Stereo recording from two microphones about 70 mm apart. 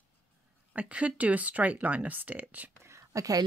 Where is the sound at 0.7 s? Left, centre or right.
Centre.